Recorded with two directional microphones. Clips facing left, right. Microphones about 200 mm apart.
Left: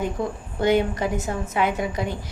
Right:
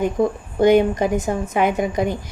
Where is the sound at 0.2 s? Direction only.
50° right (ahead or behind).